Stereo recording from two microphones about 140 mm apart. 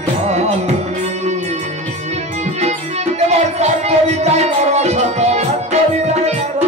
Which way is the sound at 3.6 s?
50° right (ahead or behind).